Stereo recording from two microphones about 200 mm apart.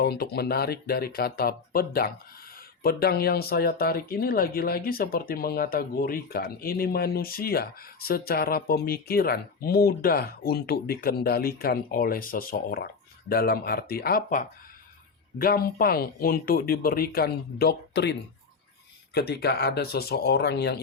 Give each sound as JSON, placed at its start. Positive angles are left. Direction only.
{"t": 0.0, "sound": "speech", "side_deg": 50}